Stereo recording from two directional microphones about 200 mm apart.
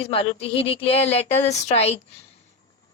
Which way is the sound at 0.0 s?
25° left (ahead or behind).